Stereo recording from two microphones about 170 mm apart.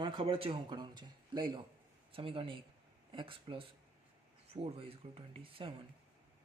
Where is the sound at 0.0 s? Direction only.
30° right (ahead or behind).